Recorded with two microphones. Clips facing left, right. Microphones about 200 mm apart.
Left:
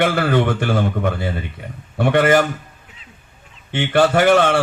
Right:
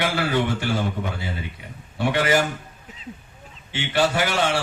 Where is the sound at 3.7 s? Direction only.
55° left (ahead or behind).